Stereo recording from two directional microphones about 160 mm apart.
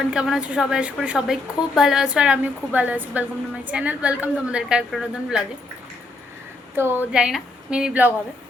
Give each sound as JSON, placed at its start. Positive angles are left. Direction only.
{"t": 0.0, "sound": "a woman's voice", "side_deg": -5}
{"t": 6.7, "sound": "a woman's voice", "side_deg": -15}
{"t": 7.1, "sound": "a woman's voice", "side_deg": -5}